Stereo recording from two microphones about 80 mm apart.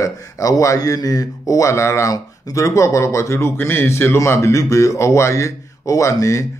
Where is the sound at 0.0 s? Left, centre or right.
Left.